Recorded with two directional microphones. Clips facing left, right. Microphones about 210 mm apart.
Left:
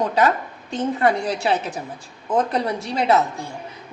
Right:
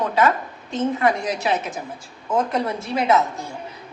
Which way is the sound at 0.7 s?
30° left (ahead or behind).